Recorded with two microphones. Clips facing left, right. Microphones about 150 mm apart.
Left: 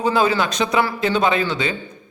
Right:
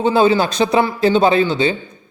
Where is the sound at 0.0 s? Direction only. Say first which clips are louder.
Right 4 dB; 25° right (ahead or behind).